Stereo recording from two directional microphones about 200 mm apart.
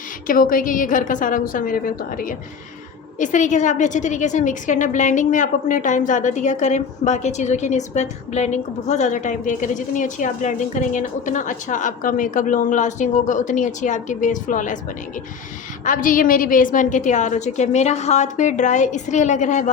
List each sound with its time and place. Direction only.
0.3 s a woman's voice: 45° left (ahead or behind)
15.8 s a woman's voice: 40° left (ahead or behind)